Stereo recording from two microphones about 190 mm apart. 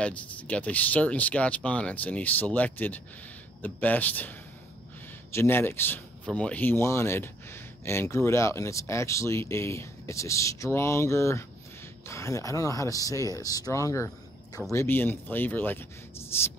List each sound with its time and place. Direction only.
0.0 s speech: 5° left (ahead or behind)